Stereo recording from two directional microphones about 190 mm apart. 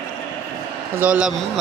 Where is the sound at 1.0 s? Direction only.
5° right (ahead or behind).